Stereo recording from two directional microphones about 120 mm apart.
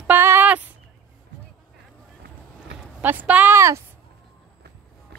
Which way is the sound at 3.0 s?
15° right (ahead or behind).